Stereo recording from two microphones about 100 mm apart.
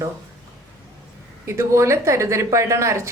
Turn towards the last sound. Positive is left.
turn(degrees=-30)  # may be behind; listen again after turning